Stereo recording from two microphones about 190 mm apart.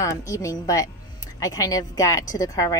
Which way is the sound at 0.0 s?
15° left (ahead or behind).